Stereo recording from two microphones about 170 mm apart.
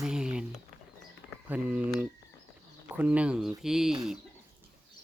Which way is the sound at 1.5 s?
10° right (ahead or behind).